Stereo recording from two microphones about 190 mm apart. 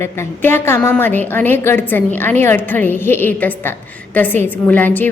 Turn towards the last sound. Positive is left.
turn(degrees=10)  # may be behind; listen again after turning